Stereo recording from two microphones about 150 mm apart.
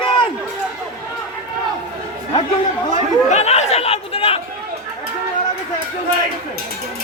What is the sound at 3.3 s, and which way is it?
Chatter, 45° left (ahead or behind).